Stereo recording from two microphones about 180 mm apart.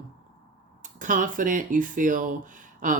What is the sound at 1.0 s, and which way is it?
Speech, 45° right (ahead or behind).